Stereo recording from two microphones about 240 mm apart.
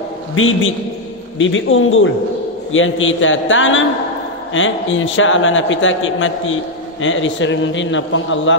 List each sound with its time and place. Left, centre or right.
0.4 s a man's voice: left